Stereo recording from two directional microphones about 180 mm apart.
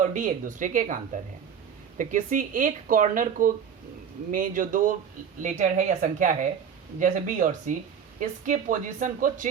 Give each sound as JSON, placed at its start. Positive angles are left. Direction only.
{"t": 0.0, "sound": "a woman's voice", "side_deg": -45}